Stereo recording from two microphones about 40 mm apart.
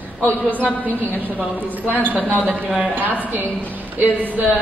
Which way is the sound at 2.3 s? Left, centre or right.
Right.